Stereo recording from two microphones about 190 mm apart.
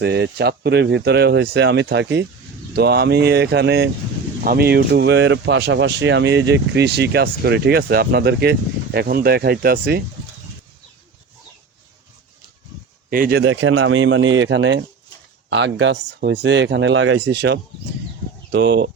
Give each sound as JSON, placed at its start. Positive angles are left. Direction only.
{"t": 0.0, "sound": "speech", "side_deg": -60}
{"t": 13.1, "sound": "speech", "side_deg": -50}
{"t": 13.4, "sound": "a man's voice", "side_deg": -90}